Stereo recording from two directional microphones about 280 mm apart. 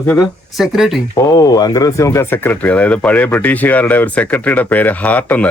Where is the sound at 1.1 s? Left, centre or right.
Centre.